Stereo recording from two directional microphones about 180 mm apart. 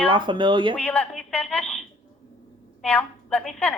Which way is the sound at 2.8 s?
5° left (ahead or behind).